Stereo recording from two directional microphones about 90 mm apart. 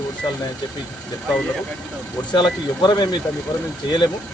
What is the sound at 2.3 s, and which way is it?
Speech, 60° left (ahead or behind).